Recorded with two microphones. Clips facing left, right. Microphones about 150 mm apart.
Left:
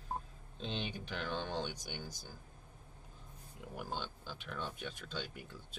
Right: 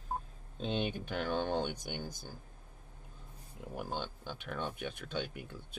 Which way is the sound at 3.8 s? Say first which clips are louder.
Right 3 dB; 55° right (ahead or behind).